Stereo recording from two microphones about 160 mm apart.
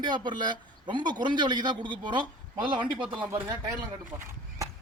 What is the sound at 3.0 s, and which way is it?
Speech, 10° right (ahead or behind).